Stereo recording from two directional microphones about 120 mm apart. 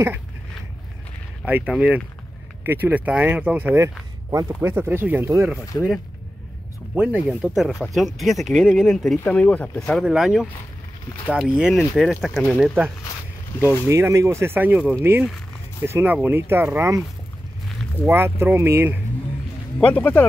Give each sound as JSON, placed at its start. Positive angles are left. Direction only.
{"t": 1.7, "sound": "speech", "side_deg": -10}
{"t": 7.0, "sound": "speech", "side_deg": -10}
{"t": 13.8, "sound": "speech", "side_deg": -25}
{"t": 18.0, "sound": "speech", "side_deg": -20}
{"t": 19.8, "sound": "speech", "side_deg": 15}